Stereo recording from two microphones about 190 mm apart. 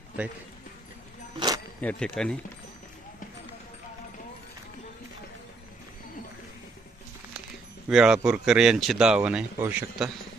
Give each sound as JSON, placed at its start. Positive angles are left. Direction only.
{"t": 1.4, "sound": "a sound", "side_deg": -20}
{"t": 1.8, "sound": "speech", "side_deg": 5}
{"t": 7.9, "sound": "speech", "side_deg": -5}